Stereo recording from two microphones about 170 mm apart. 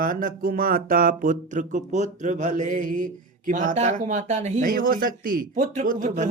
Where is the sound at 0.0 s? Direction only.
50° right (ahead or behind).